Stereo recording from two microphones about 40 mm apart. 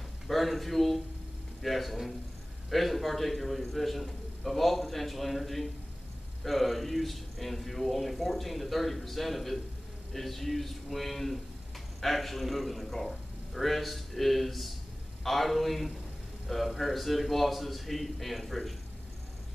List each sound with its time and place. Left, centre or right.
0.3 s a man's voice: centre